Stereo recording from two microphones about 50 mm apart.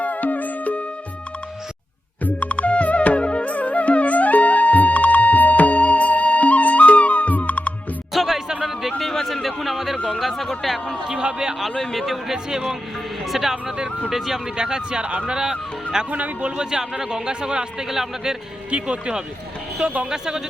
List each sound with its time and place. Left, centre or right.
0.0 s music: left
2.2 s music: left
8.1 s music: centre
9.0 s a sound: centre
11.1 s a man's voice: centre
11.8 s speech: centre
12.0 s a man's voice: centre
14.5 s a man's voice: centre
16.0 s speech: right
16.6 s a man's voice: centre
18.7 s speech: right
20.1 s a man's voice: centre